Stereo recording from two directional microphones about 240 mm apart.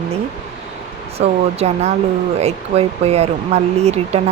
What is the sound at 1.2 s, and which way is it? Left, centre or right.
Speech, right.